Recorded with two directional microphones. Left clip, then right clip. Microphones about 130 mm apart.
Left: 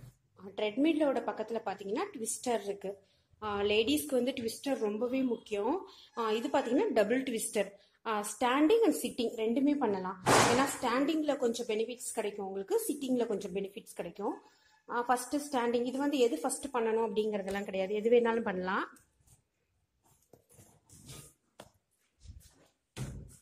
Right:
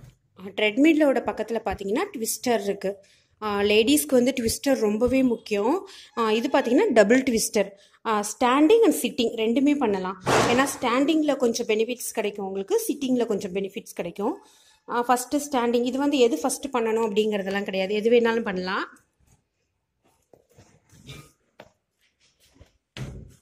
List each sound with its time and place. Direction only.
0.4 s speech: 30° right (ahead or behind)
0.8 s a woman's voice: 45° right (ahead or behind); by 18.9 s 10° right (ahead or behind)